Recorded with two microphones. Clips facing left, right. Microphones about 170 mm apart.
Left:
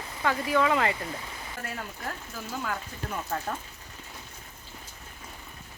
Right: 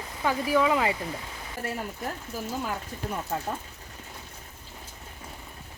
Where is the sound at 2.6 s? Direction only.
15° right (ahead or behind).